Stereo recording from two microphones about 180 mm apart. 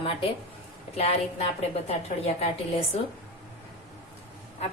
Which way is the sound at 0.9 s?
35° left (ahead or behind).